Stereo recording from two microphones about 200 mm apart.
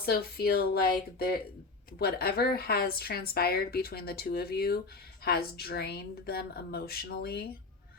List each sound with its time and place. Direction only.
0.0 s a woman's voice: 50° left (ahead or behind)
2.0 s a woman's voice: 50° left (ahead or behind)